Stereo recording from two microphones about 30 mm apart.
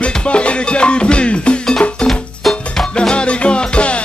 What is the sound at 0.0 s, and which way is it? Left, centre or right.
Music, left.